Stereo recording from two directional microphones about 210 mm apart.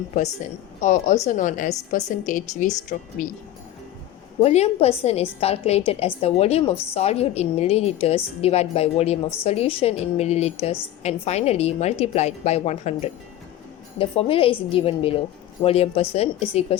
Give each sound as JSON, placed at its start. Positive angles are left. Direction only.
{"t": 0.8, "sound": "a woman's voice", "side_deg": 35}
{"t": 4.4, "sound": "a woman's voice", "side_deg": 30}